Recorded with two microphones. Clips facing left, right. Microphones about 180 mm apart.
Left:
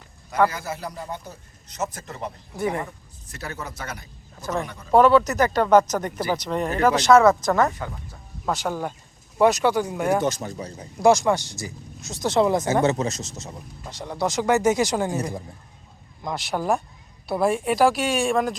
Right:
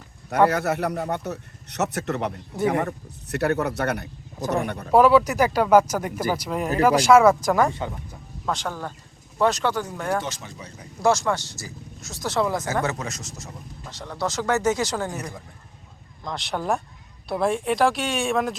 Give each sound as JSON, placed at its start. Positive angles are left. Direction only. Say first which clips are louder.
{"t": 0.5, "sound": "speech", "louder": "right 8 dB", "side_deg": -65}
{"t": 4.9, "sound": "speech", "louder": "even", "side_deg": -5}
{"t": 8.4, "sound": "speech", "louder": "left 3 dB", "side_deg": 10}
{"t": 10.2, "sound": "speech", "louder": "left 8 dB", "side_deg": 40}
{"t": 11.0, "sound": "speech", "louder": "left 4 dB", "side_deg": 15}
{"t": 15.1, "sound": "speech", "louder": "left 6 dB", "side_deg": 25}
{"t": 16.2, "sound": "speech", "louder": "left 2 dB", "side_deg": 5}